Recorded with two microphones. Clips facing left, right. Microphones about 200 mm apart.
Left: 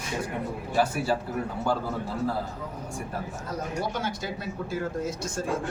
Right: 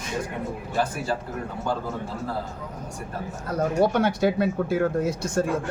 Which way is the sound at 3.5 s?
60° right (ahead or behind).